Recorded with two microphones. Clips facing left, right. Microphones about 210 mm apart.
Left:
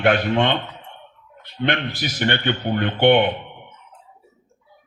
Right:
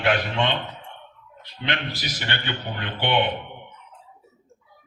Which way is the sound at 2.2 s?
50° left (ahead or behind).